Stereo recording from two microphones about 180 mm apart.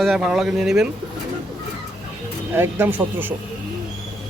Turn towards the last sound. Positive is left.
turn(degrees=-10)  # may be behind; listen again after turning